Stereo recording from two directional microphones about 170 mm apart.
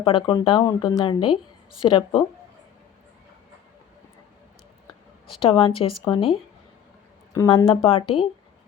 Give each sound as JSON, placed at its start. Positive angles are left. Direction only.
{"t": 0.0, "sound": "speech", "side_deg": 30}
{"t": 5.4, "sound": "speech", "side_deg": 30}
{"t": 7.3, "sound": "speech", "side_deg": 20}
{"t": 7.7, "sound": "speech", "side_deg": 30}